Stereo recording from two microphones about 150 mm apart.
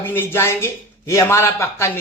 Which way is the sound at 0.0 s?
15° left (ahead or behind).